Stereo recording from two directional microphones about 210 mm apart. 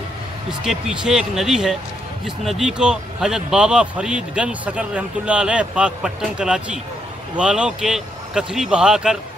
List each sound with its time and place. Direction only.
0.7 s speech: centre (ahead or behind)